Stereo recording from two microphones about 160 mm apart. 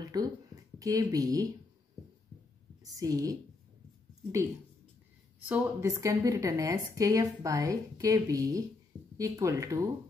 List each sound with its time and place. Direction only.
0.0 s a sound: 25° right (ahead or behind)
0.7 s a woman's voice: 20° right (ahead or behind)
2.8 s a woman's voice: 20° right (ahead or behind)
5.5 s a woman's voice: 15° right (ahead or behind)